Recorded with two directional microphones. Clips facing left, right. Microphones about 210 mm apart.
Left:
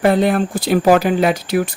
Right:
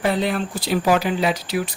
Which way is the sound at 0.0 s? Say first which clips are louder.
Left 7 dB; 55° left (ahead or behind).